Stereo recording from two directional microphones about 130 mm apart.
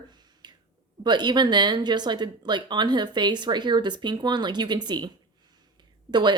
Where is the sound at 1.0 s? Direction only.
35° right (ahead or behind).